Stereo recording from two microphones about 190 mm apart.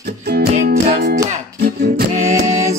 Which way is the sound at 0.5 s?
50° right (ahead or behind).